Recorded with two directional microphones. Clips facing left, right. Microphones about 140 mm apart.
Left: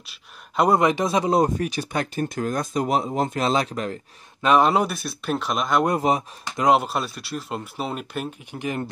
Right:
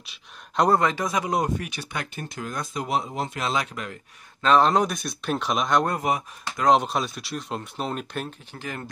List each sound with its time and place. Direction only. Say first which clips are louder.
0.0 s speech: even; centre (ahead or behind)
0.7 s speech: left 4 dB; 20° left (ahead or behind); by 4.0 s 35° left (ahead or behind)
4.4 s speech: left 1 dB; 10° left (ahead or behind)
5.9 s speech: left 4 dB; 30° left (ahead or behind)
6.6 s speech: left 1 dB; 5° left (ahead or behind)